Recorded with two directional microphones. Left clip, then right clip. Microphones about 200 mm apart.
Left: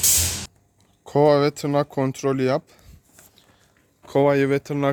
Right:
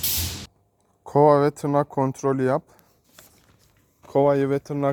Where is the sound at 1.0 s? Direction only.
5° right (ahead or behind).